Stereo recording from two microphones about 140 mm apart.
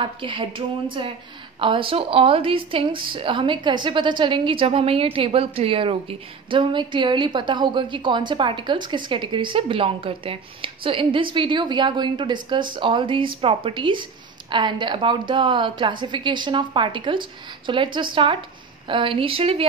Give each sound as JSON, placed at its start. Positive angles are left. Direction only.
{"t": 0.0, "sound": "a woman's voice", "side_deg": -35}